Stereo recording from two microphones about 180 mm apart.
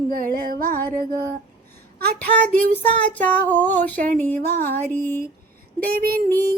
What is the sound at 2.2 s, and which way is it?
Child singing, 10° left (ahead or behind).